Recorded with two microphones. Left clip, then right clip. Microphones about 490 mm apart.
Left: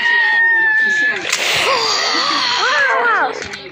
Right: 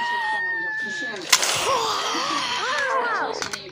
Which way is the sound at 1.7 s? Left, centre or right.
Left.